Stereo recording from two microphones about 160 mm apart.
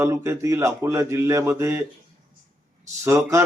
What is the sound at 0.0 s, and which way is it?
A man's voice, 15° right (ahead or behind).